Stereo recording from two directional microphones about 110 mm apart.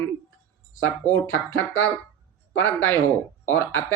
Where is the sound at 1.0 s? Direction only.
25° left (ahead or behind).